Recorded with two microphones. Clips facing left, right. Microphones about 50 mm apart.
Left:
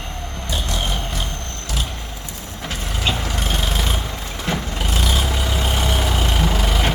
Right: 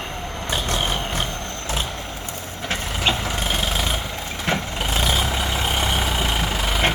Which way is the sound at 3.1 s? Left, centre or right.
Right.